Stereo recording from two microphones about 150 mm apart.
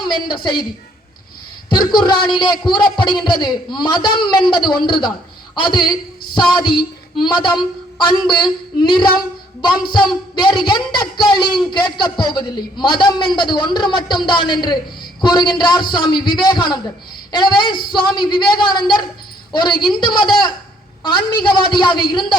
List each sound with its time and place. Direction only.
0.1 s a man's voice: 30° left (ahead or behind)
1.7 s speech: 30° left (ahead or behind)
8.8 s a man's voice: 35° left (ahead or behind)